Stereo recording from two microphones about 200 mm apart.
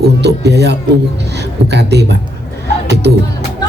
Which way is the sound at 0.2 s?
55° right (ahead or behind).